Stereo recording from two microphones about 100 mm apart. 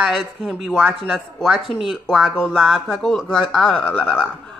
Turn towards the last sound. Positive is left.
turn(degrees=15)  # may be behind; listen again after turning